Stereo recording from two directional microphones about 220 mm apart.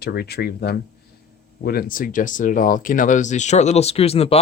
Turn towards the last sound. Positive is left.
turn(degrees=25)  # may be behind; listen again after turning